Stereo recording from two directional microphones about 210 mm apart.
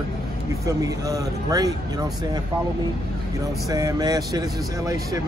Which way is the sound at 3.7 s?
15° right (ahead or behind).